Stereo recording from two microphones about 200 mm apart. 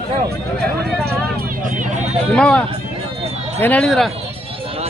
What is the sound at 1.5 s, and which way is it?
Vehicle, 40° right (ahead or behind).